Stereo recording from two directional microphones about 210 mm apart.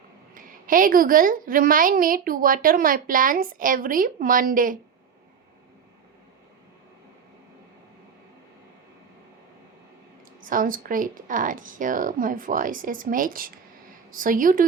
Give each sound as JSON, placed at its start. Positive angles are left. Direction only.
{"t": 0.3, "sound": "a woman's voice", "side_deg": -40}
{"t": 10.4, "sound": "a woman's voice", "side_deg": -40}